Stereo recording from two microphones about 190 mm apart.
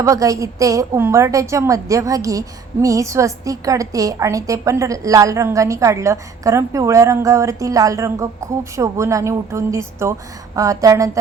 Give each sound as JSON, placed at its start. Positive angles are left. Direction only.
{"t": 0.0, "sound": "a woman's voice", "side_deg": -15}